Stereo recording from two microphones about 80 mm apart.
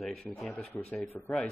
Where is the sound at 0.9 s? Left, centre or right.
Left.